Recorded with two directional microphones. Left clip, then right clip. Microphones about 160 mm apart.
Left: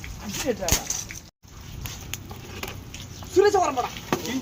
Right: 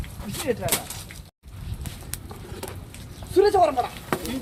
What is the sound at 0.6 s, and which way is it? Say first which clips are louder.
Speech: left 3 dB; 5° left (ahead or behind).